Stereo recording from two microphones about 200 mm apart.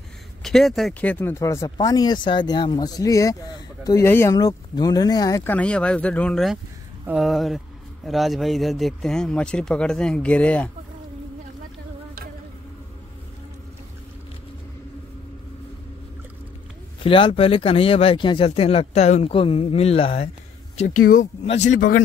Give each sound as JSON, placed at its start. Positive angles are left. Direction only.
{"t": 0.4, "sound": "speech", "side_deg": 0}
{"t": 17.0, "sound": "speech", "side_deg": 25}
{"t": 21.5, "sound": "a man's voice", "side_deg": 35}
{"t": 21.7, "sound": "a man's voice", "side_deg": 65}